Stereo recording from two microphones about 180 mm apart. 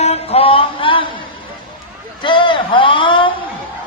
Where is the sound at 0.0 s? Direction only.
35° left (ahead or behind).